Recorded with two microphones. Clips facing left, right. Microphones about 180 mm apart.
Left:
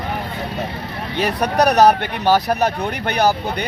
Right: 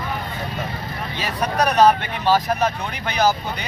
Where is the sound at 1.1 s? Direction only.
65° left (ahead or behind).